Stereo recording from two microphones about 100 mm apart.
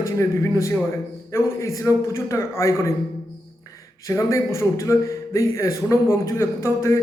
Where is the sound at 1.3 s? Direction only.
30° left (ahead or behind).